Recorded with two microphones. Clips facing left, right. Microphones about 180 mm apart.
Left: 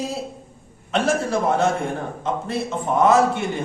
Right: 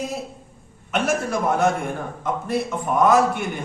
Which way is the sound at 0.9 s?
30° left (ahead or behind).